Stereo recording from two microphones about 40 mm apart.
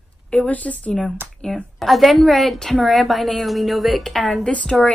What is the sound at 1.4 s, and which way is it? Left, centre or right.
Speech, centre.